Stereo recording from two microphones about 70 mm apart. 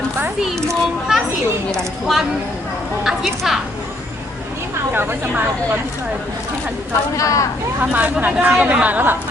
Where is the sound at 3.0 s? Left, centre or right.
Centre.